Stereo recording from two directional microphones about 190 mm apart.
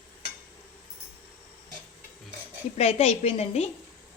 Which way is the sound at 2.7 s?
35° left (ahead or behind).